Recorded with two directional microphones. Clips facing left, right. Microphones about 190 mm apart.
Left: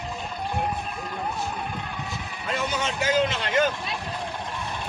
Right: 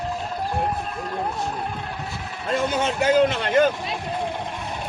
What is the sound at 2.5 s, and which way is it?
A man's voice, 50° right (ahead or behind).